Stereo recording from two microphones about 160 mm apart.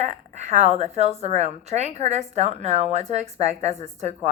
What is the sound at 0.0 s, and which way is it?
A woman's voice, 45° right (ahead or behind).